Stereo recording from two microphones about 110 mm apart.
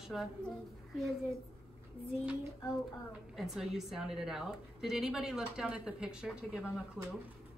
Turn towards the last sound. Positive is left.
turn(degrees=-5)  # may be behind; listen again after turning